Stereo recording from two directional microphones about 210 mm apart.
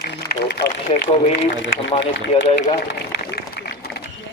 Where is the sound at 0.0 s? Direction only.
50° left (ahead or behind).